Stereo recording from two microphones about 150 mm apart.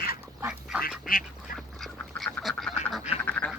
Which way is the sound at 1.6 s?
Centre (ahead or behind).